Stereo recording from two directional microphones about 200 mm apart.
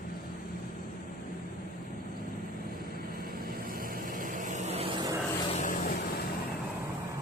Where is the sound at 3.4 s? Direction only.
45° right (ahead or behind).